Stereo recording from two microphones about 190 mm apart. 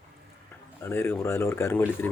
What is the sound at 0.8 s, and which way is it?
Speech, 10° left (ahead or behind).